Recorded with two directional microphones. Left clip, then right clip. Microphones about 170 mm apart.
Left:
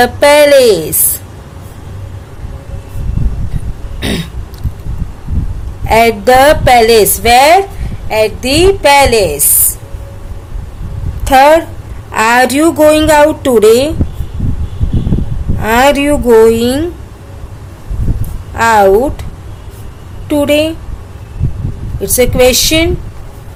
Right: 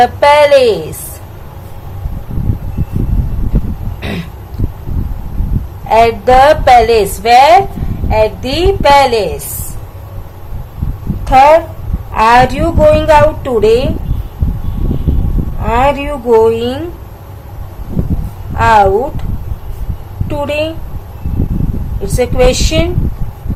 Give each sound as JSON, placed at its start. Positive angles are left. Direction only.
{"t": 0.0, "sound": "a woman's voice", "side_deg": 40}
{"t": 4.0, "sound": "throat clearing", "side_deg": 35}
{"t": 5.9, "sound": "a woman's voice", "side_deg": 40}
{"t": 12.1, "sound": "a woman's voice", "side_deg": 45}
{"t": 15.6, "sound": "a woman's voice", "side_deg": 50}
{"t": 18.5, "sound": "a woman's voice", "side_deg": 40}
{"t": 20.2, "sound": "a woman's voice", "side_deg": 35}
{"t": 22.0, "sound": "a woman's voice", "side_deg": 35}